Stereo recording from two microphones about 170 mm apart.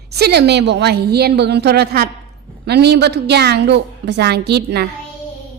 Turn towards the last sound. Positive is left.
turn(degrees=-75)  # may be behind; listen again after turning